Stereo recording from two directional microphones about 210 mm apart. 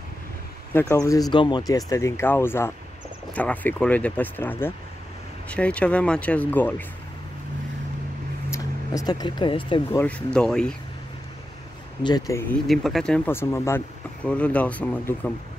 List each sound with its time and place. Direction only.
0.7 s speech: 15° left (ahead or behind)
8.5 s speech: 15° left (ahead or behind)
9.9 s speech: 5° left (ahead or behind)
12.0 s speech: 20° left (ahead or behind)
12.6 s speech: centre (ahead or behind)